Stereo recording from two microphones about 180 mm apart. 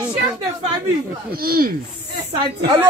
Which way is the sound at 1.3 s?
55° right (ahead or behind).